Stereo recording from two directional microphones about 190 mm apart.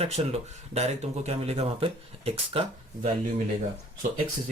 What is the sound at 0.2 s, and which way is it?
Speech, 30° right (ahead or behind).